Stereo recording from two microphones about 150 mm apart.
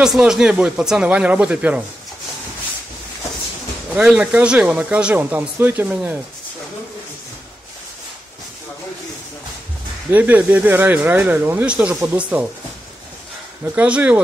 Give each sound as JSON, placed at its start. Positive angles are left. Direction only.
{"t": 0.0, "sound": "speech", "side_deg": -5}
{"t": 3.9, "sound": "speech", "side_deg": -10}
{"t": 10.1, "sound": "speech", "side_deg": -10}
{"t": 11.9, "sound": "speech", "side_deg": -20}
{"t": 13.7, "sound": "speech", "side_deg": -10}